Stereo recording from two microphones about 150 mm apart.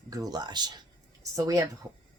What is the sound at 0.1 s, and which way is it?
Speech, 25° right (ahead or behind).